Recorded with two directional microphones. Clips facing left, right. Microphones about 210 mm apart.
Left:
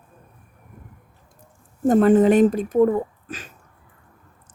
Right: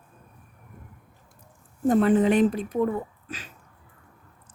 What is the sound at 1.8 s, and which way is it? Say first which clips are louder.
Speech: left 5 dB; 45° left (ahead or behind).